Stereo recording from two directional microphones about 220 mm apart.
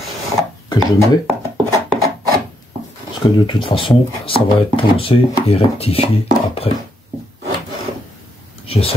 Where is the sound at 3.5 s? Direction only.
20° left (ahead or behind).